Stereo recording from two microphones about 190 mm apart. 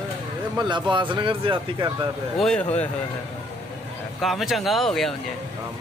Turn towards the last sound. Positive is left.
turn(degrees=0)  # may be behind; listen again after turning